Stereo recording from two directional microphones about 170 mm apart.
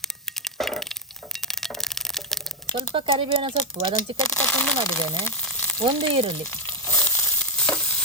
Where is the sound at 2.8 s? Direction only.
30° right (ahead or behind).